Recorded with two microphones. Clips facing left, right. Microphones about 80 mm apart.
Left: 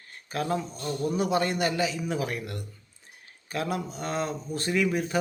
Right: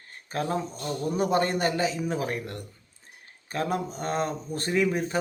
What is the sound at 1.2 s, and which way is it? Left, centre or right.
A man's voice, right.